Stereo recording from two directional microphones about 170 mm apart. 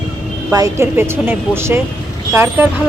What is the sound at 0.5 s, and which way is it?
Speech, 20° right (ahead or behind).